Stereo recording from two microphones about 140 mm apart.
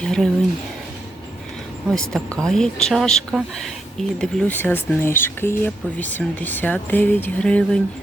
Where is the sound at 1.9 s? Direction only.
5° left (ahead or behind).